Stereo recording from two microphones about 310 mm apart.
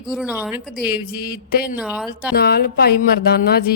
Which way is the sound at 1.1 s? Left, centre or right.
Left.